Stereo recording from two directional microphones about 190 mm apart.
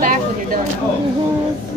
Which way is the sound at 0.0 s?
45° right (ahead or behind).